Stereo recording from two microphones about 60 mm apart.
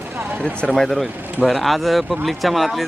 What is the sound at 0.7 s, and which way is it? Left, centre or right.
Speech, centre.